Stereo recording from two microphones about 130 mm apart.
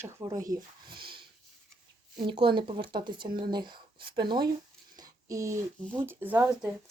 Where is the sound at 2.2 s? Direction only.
40° right (ahead or behind).